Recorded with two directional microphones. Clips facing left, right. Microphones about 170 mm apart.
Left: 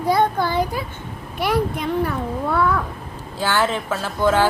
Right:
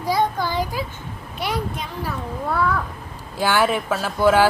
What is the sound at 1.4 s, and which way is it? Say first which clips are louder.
Speech: left 5 dB; 55° left (ahead or behind).